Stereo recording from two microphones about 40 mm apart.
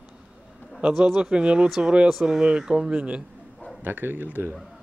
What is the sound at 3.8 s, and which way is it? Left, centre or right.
Speech, right.